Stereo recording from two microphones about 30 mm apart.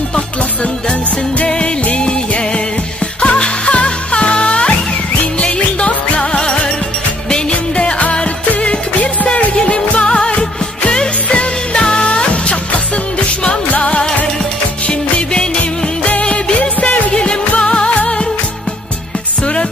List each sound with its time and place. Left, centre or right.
2.0 s music: left
8.6 s music: left
11.7 s music: left
12.0 s music: left
17.1 s music: left